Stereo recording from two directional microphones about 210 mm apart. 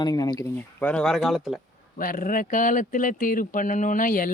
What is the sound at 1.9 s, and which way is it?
Speech, 40° left (ahead or behind).